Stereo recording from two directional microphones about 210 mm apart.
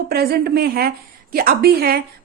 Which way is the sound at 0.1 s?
50° right (ahead or behind).